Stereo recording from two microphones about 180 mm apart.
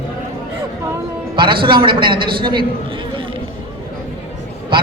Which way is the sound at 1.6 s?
30° right (ahead or behind).